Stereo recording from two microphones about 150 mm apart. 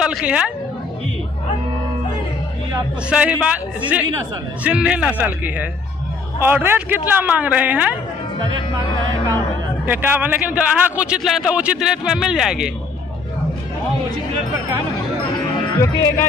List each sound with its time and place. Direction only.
0.0 s a woman's voice: 5° right (ahead or behind)
3.1 s a man's voice: 10° right (ahead or behind)
9.8 s a man's voice: 10° right (ahead or behind)
15.8 s music: 20° left (ahead or behind)